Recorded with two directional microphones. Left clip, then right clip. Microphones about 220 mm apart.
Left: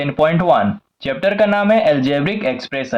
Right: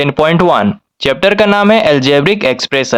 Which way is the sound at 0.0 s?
45° right (ahead or behind).